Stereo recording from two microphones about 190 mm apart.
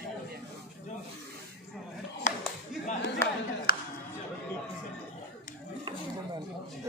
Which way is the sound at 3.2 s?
15° left (ahead or behind).